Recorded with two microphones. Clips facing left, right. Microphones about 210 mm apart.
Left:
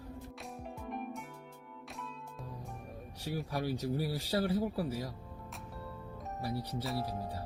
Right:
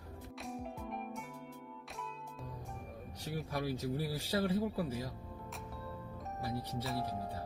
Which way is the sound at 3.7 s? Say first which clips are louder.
Left 4 dB; 30° left (ahead or behind).